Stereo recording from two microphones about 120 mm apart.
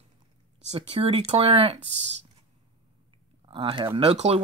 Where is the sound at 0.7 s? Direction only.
55° right (ahead or behind).